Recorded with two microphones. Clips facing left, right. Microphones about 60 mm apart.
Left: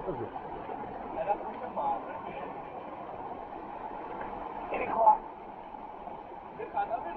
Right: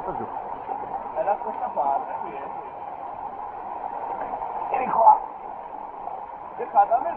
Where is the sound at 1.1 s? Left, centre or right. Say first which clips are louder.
Right 7 dB; right.